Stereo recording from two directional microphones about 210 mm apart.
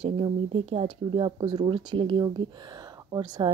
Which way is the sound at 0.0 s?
25° right (ahead or behind).